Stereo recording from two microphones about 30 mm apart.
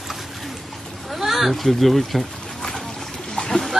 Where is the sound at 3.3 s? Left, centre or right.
Centre.